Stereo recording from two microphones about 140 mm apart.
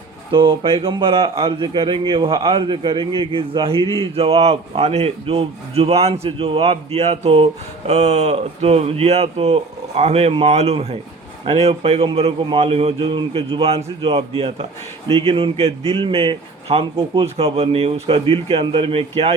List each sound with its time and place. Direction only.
0.3 s a man's voice: 40° right (ahead or behind)